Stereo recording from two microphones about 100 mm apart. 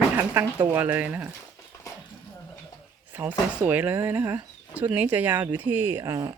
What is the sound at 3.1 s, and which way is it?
Speech, 20° right (ahead or behind).